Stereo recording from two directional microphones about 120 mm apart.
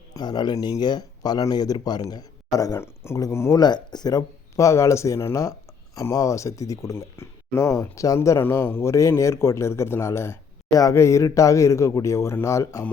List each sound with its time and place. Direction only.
0.1 s speech: 35° left (ahead or behind)
3.6 s speech: 35° left (ahead or behind)